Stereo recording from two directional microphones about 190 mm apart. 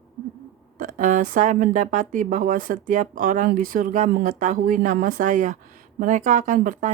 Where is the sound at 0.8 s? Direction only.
40° right (ahead or behind).